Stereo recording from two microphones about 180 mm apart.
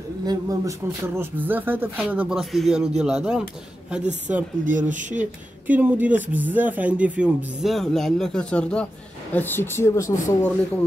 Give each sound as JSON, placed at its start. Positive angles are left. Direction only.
{"t": 0.2, "sound": "speech", "side_deg": -20}
{"t": 4.6, "sound": "speech", "side_deg": -45}
{"t": 5.2, "sound": "speech", "side_deg": -10}